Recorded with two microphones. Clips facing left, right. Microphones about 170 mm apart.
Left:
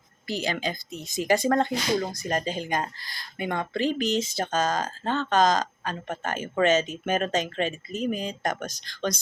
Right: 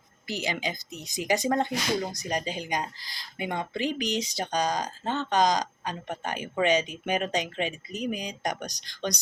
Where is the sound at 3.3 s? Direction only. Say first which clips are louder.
Left 3 dB; 15° right (ahead or behind).